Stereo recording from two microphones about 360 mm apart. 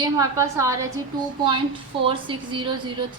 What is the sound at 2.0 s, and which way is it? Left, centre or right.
Speech, centre.